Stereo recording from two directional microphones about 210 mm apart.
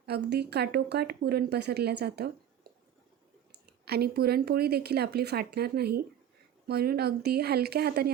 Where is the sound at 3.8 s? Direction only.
50° right (ahead or behind).